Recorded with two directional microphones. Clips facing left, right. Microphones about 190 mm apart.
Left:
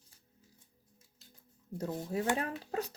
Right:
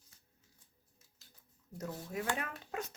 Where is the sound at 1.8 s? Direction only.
30° left (ahead or behind).